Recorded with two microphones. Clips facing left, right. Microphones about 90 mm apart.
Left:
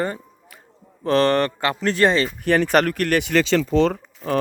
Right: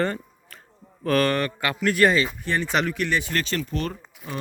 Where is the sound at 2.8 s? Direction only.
55° left (ahead or behind); by 4.4 s 70° left (ahead or behind).